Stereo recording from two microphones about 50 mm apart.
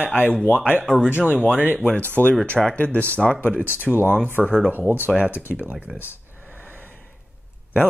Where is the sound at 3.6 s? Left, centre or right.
Right.